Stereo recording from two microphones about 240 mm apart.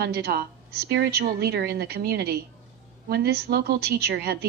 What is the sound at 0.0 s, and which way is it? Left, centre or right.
A woman's voice, right.